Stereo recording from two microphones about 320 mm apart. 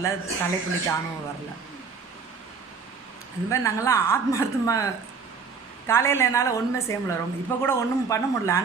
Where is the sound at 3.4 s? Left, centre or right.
Centre.